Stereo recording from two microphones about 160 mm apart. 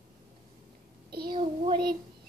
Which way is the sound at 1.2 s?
30° right (ahead or behind).